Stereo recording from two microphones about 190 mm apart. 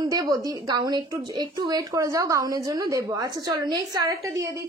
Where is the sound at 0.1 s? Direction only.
20° right (ahead or behind).